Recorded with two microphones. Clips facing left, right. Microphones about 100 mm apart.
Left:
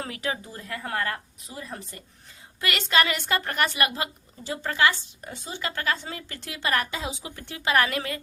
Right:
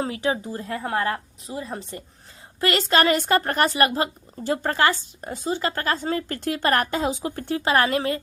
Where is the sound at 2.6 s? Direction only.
35° right (ahead or behind).